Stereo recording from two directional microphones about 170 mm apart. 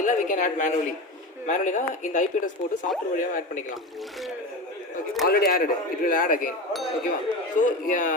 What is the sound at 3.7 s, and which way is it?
Speech, centre (ahead or behind).